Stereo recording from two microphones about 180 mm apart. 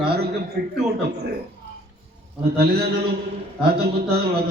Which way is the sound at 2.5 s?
60° right (ahead or behind).